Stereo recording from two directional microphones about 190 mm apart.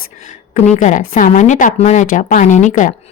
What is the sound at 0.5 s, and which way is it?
A woman's voice, 40° left (ahead or behind).